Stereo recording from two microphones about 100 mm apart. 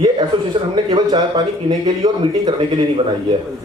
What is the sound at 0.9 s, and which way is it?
Speech, 45° right (ahead or behind).